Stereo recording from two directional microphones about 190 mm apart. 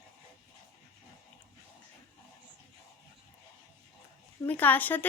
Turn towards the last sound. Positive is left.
turn(degrees=10)  # may be behind; listen again after turning